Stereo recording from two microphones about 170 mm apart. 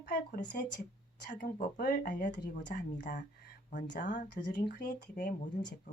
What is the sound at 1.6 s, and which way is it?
Speech, 70° left (ahead or behind).